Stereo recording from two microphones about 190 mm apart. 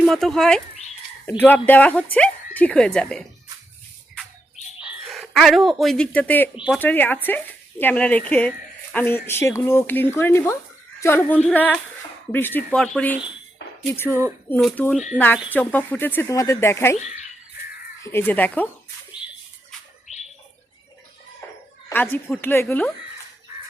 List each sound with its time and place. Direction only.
0.0 s speech: centre (ahead or behind)
4.8 s speech: 5° right (ahead or behind)
14.1 s speech: 10° right (ahead or behind)
14.5 s speech: 10° left (ahead or behind)
18.0 s speech: 10° left (ahead or behind)
20.1 s bird: 40° left (ahead or behind)
21.4 s a sound: 15° left (ahead or behind)
21.8 s speech: 10° left (ahead or behind)